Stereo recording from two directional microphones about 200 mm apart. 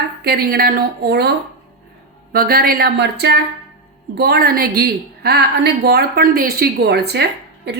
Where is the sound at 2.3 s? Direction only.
50° right (ahead or behind).